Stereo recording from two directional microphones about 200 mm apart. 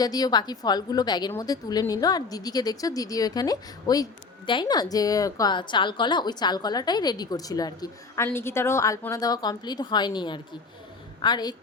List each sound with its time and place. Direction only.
0.0 s a woman's voice: 20° left (ahead or behind)